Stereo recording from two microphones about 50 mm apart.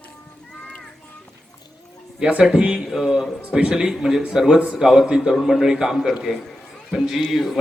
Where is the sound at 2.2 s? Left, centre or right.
Centre.